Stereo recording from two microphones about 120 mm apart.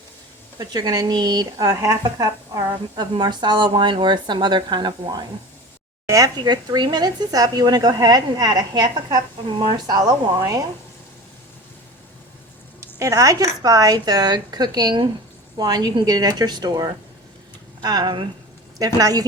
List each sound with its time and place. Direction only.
0.6 s speech: 35° right (ahead or behind)
12.8 s speech: 25° right (ahead or behind)